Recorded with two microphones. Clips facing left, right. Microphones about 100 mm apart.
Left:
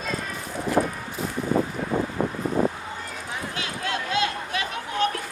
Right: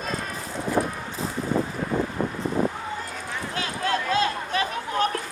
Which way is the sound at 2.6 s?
30° left (ahead or behind).